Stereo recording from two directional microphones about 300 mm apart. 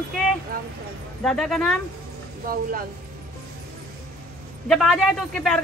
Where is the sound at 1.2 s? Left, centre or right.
Centre.